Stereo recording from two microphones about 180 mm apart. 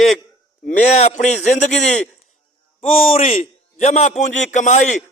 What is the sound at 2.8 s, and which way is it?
A man's voice, 30° left (ahead or behind).